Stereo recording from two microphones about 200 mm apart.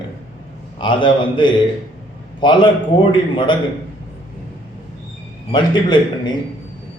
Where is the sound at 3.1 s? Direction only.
25° left (ahead or behind).